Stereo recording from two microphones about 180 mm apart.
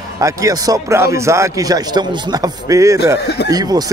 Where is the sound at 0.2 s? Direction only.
20° right (ahead or behind).